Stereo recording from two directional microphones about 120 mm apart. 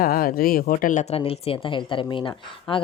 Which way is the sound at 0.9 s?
90° left.